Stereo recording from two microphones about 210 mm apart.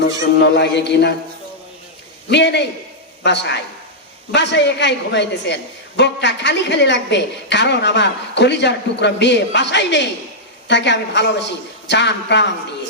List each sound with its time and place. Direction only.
0.0 s a woman's voice: 55° left (ahead or behind)
2.3 s a woman's voice: 55° left (ahead or behind)